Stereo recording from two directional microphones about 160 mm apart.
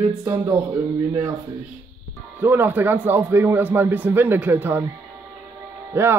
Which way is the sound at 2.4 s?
15° right (ahead or behind).